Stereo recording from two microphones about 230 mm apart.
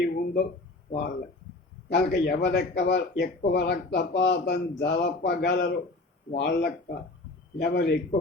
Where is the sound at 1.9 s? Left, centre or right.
Left.